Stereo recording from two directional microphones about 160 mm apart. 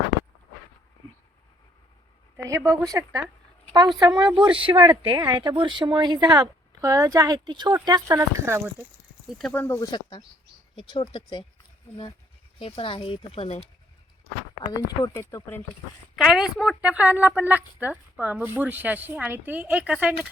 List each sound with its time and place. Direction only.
2.3 s a woman's voice: 15° right (ahead or behind)
9.5 s speech: 15° left (ahead or behind)
9.9 s speech: 30° left (ahead or behind)
12.5 s speech: 35° left (ahead or behind)
14.8 s speech: 20° left (ahead or behind)
16.1 s a woman's voice: centre (ahead or behind)